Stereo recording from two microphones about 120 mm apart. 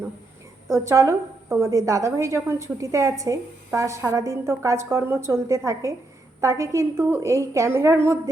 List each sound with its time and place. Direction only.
0.9 s a woman's voice: 25° right (ahead or behind)